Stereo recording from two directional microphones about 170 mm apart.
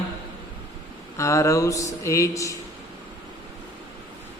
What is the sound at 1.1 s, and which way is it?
A man's voice, 20° left (ahead or behind).